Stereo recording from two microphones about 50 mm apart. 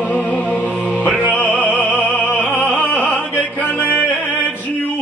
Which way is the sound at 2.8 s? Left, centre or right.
Left.